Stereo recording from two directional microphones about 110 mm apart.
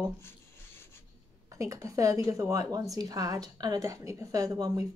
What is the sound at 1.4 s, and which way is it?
A woman's voice, 30° right (ahead or behind).